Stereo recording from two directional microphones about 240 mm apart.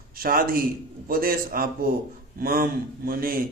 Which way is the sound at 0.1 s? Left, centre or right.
Right.